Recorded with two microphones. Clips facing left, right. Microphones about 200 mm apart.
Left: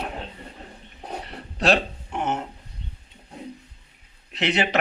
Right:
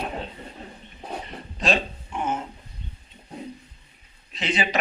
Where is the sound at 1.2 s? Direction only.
70° left (ahead or behind).